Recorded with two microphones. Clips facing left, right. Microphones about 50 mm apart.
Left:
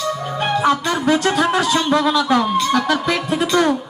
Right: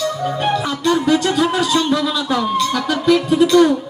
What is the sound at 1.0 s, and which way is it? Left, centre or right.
Speech, left.